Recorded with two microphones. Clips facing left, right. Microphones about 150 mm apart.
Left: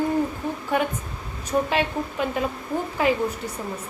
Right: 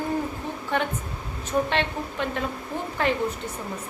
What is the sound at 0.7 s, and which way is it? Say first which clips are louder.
A woman's voice: left 2 dB; 10° left (ahead or behind).